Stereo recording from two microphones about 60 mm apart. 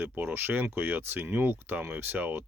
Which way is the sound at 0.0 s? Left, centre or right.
Right.